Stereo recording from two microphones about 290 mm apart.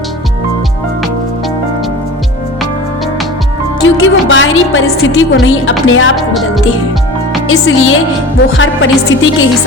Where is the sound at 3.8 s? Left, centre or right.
Left.